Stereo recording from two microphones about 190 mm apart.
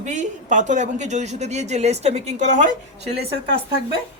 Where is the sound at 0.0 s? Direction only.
40° right (ahead or behind).